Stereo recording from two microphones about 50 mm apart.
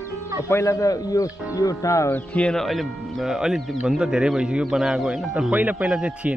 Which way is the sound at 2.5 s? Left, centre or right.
Centre.